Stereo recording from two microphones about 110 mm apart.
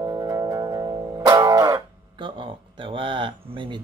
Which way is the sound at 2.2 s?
45° right (ahead or behind).